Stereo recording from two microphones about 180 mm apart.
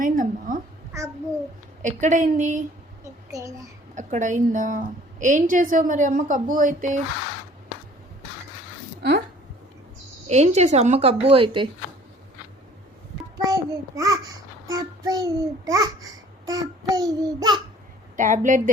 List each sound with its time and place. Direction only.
0.0 s a sound: 50° right (ahead or behind)
1.8 s a woman's voice: 45° right (ahead or behind)
3.0 s a sound: 15° right (ahead or behind)
3.9 s a woman's voice: 45° right (ahead or behind)
10.2 s a woman's voice: 35° right (ahead or behind)
13.4 s a child's voice: 20° right (ahead or behind)
16.5 s child singing: 20° right (ahead or behind)
18.2 s a woman's voice: 45° right (ahead or behind)